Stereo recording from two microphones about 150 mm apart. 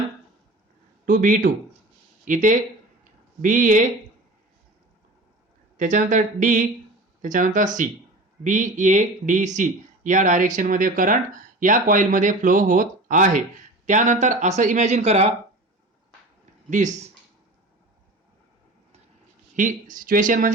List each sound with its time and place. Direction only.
1.0 s speech: 60° right (ahead or behind)
5.7 s speech: 55° right (ahead or behind)
16.6 s speech: 60° right (ahead or behind)
19.5 s speech: 60° right (ahead or behind)